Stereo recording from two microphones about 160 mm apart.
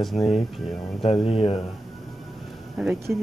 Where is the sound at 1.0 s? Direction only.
40° left (ahead or behind).